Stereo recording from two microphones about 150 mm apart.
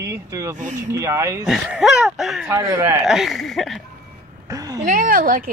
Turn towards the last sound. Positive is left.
turn(degrees=-65)  # may be behind; listen again after turning